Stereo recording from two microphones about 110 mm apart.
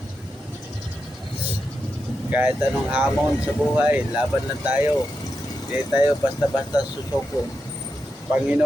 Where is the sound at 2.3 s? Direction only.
15° right (ahead or behind).